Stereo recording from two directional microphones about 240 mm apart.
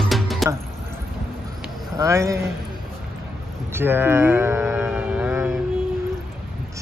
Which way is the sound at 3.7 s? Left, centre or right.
Centre.